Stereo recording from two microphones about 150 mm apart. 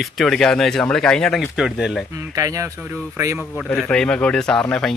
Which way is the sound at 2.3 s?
20° right (ahead or behind).